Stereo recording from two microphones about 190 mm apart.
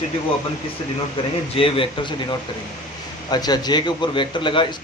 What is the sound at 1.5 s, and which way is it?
Speech, 30° left (ahead or behind).